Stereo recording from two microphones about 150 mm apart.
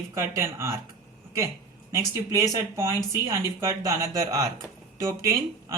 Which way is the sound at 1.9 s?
20° right (ahead or behind).